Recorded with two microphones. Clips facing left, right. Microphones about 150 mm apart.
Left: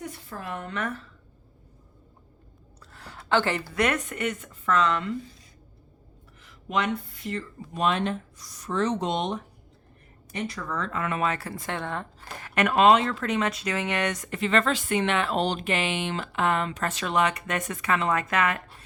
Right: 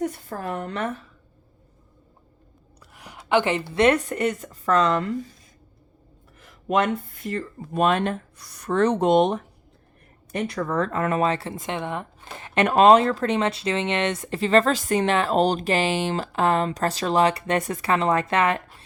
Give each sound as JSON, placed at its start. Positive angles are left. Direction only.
{"t": 0.0, "sound": "a woman's voice", "side_deg": -45}
{"t": 2.9, "sound": "speech", "side_deg": -15}
{"t": 6.4, "sound": "speech", "side_deg": -50}